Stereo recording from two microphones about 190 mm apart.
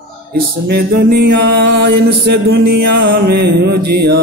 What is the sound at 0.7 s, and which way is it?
Mantra, 55° right (ahead or behind).